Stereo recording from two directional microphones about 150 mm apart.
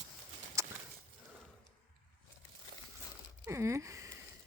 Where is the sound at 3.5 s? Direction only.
20° right (ahead or behind).